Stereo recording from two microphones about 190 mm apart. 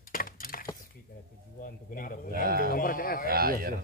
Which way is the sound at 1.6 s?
45° left (ahead or behind).